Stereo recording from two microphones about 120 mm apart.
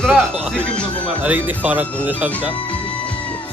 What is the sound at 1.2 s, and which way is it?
Speech, 15° right (ahead or behind).